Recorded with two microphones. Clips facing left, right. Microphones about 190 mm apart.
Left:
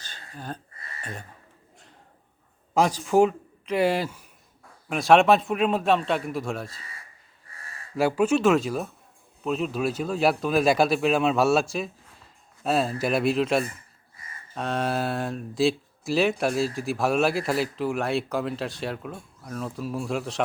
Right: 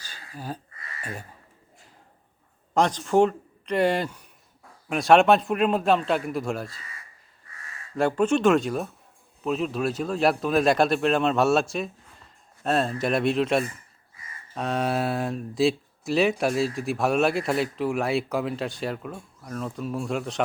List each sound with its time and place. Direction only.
0.0 s a sound: 10° right (ahead or behind)
2.7 s speech: 5° left (ahead or behind)
7.5 s gasp: 30° left (ahead or behind)
7.9 s speech: 5° left (ahead or behind)
12.6 s speech: 5° left (ahead or behind)